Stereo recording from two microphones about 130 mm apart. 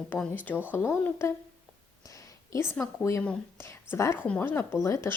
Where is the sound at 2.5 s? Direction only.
20° left (ahead or behind).